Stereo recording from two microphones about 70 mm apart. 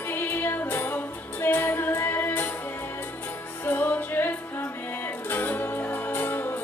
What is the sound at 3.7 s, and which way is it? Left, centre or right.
Music, left.